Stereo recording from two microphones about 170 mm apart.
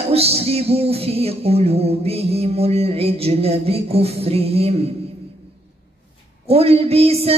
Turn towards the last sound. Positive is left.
turn(degrees=-35)  # may be behind; listen again after turning